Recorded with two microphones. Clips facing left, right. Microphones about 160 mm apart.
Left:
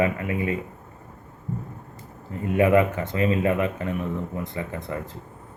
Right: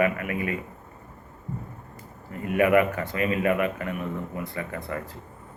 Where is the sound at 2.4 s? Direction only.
25° left (ahead or behind).